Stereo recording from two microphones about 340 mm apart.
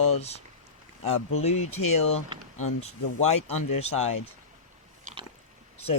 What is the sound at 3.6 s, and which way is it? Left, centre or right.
Speech, left.